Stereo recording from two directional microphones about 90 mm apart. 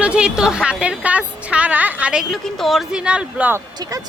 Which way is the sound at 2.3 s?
Centre (ahead or behind).